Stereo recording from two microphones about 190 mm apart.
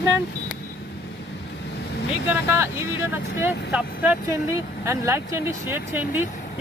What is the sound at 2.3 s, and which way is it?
Speech, 15° right (ahead or behind).